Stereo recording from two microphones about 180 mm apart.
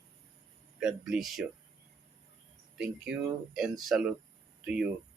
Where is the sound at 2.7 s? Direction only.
5° right (ahead or behind).